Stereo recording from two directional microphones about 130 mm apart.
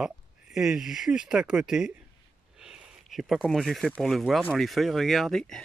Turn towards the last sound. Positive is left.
turn(degrees=5)  # may be behind; listen again after turning